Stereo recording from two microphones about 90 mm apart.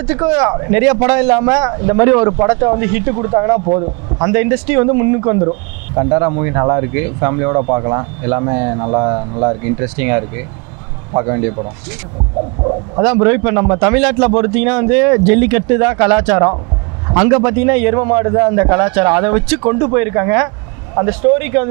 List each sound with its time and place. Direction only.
0.0 s a man's voice: 25° right (ahead or behind)
12.6 s a man's voice: 25° right (ahead or behind)